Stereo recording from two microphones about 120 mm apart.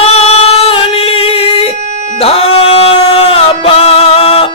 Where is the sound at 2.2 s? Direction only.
55° left (ahead or behind).